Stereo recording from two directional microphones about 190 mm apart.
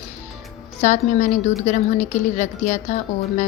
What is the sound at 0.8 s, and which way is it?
A woman's voice, 35° left (ahead or behind).